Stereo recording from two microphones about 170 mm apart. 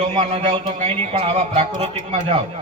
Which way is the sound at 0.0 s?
35° right (ahead or behind).